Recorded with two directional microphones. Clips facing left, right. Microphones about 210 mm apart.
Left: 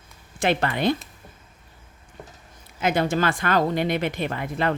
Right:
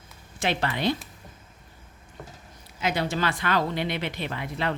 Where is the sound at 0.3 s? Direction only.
50° left (ahead or behind).